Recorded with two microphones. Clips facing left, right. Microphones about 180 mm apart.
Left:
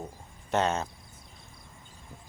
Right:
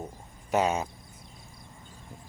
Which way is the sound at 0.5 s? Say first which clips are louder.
Right 1 dB; 10° right (ahead or behind).